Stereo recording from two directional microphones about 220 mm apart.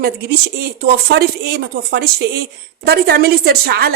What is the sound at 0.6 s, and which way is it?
A woman's voice, 50° right (ahead or behind).